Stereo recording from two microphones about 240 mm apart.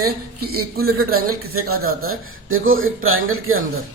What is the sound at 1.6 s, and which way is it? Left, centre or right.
Speech, right.